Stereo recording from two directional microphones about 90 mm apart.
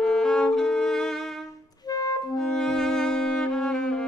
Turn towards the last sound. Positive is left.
turn(degrees=10)  # may be behind; listen again after turning